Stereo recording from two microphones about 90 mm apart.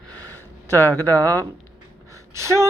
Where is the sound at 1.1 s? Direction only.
40° right (ahead or behind).